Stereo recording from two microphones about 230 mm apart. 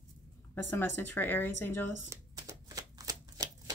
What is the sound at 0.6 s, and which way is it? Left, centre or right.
Speech, centre.